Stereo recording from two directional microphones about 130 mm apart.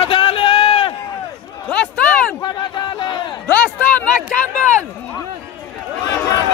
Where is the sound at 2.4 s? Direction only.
35° left (ahead or behind).